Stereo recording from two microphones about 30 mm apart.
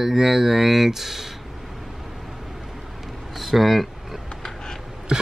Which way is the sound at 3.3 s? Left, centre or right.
Centre.